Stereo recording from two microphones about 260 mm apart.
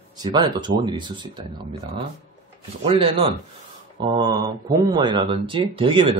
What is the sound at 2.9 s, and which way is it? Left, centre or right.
Speech, right.